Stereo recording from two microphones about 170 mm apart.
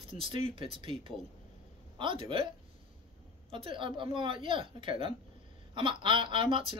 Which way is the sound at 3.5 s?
30° right (ahead or behind).